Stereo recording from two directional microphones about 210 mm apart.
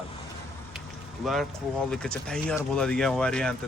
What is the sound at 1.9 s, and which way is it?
Speech, 5° left (ahead or behind).